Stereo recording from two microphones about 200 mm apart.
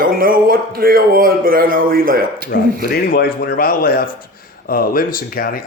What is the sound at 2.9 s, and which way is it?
Speech, 50° left (ahead or behind).